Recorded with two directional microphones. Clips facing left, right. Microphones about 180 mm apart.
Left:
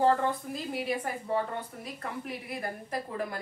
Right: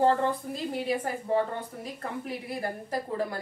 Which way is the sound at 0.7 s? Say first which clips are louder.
Right 3 dB; 35° right (ahead or behind).